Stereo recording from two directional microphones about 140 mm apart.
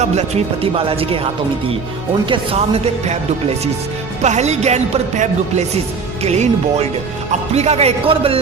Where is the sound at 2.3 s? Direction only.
40° right (ahead or behind).